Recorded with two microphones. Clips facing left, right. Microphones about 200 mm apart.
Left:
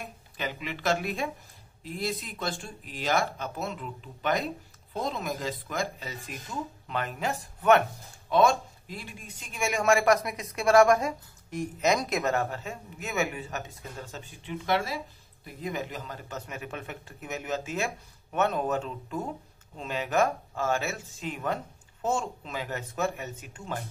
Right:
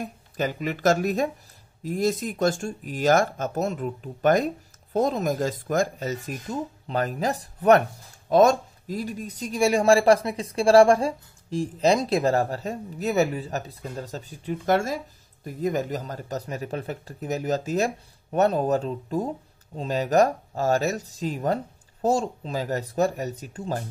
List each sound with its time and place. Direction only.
0.0 s speech: 45° right (ahead or behind)